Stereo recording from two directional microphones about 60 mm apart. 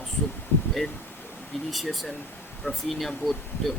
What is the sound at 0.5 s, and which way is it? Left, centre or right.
Speech, left.